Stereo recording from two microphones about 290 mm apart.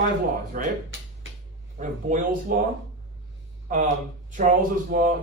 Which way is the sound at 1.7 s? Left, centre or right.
Right.